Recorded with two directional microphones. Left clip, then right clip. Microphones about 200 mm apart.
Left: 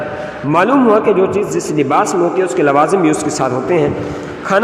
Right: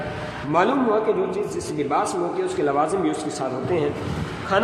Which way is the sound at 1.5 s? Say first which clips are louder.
Left 9 dB; 40° left (ahead or behind).